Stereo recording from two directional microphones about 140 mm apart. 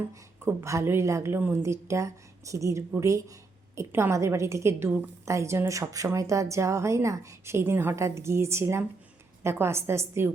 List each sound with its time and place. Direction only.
0.1 s a woman's voice: 20° right (ahead or behind)